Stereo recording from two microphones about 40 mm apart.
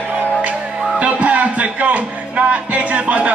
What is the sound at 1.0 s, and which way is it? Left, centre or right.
Music, right.